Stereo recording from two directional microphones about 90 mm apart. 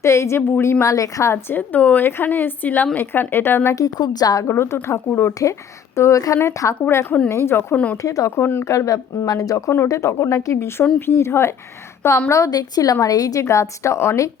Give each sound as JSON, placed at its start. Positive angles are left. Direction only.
{"t": 0.0, "sound": "a woman's voice", "side_deg": 30}
{"t": 3.8, "sound": "a woman's voice", "side_deg": 45}
{"t": 4.4, "sound": "a woman's voice", "side_deg": 30}
{"t": 6.0, "sound": "a woman's voice", "side_deg": 35}
{"t": 8.0, "sound": "a woman's voice", "side_deg": 35}
{"t": 12.3, "sound": "speech", "side_deg": 40}